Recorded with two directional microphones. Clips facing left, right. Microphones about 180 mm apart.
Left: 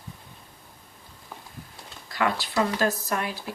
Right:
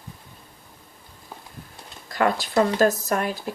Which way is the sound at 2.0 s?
45° right (ahead or behind).